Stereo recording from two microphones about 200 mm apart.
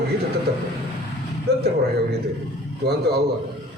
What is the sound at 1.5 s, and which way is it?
Speech, 55° right (ahead or behind).